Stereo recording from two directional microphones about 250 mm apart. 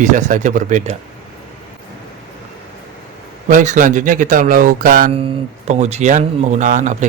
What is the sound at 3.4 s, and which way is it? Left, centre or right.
Speech, right.